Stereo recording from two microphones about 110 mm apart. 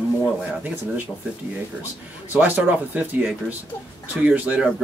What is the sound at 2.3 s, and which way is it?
Speech, 15° right (ahead or behind).